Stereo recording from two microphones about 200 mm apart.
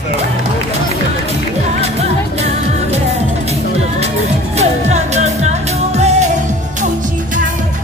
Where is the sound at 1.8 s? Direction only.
30° right (ahead or behind).